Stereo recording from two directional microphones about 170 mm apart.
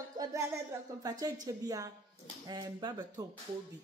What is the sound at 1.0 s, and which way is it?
A woman's voice, 20° right (ahead or behind).